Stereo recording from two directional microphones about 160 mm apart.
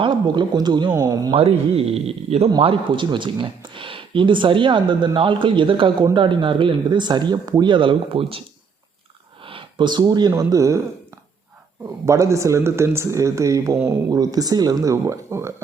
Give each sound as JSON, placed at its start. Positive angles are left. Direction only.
{"t": 0.0, "sound": "speech", "side_deg": -30}
{"t": 1.4, "sound": "speech", "side_deg": -40}
{"t": 9.4, "sound": "speech", "side_deg": -35}
{"t": 12.0, "sound": "speech", "side_deg": -20}